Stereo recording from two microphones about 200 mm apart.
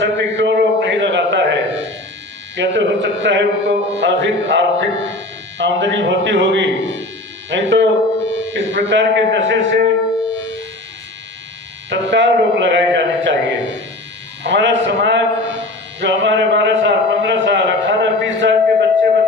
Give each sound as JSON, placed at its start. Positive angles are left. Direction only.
{"t": 0.0, "sound": "music", "side_deg": -65}
{"t": 2.6, "sound": "a man's voice", "side_deg": -65}
{"t": 11.9, "sound": "a sound", "side_deg": -65}